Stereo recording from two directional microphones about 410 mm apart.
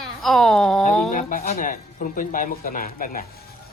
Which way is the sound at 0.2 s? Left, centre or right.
Centre.